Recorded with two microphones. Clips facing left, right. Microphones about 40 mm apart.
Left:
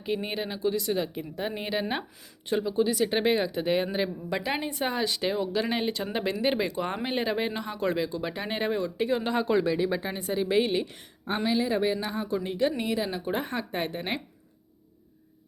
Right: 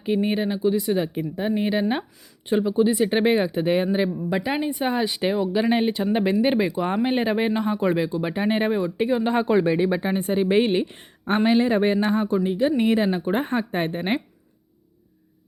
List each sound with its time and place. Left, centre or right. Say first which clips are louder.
0.0 s speech: right 8 dB; centre
2.5 s speech: right 6 dB; centre
11.3 s speech: right 7 dB; right
12.4 s speech: right 6 dB; centre
12.8 s speech: right 8 dB; right